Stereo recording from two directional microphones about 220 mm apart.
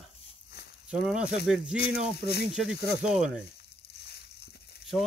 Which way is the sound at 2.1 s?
45° left (ahead or behind).